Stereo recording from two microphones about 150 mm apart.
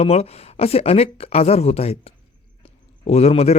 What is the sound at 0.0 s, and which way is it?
Speech, 45° left (ahead or behind).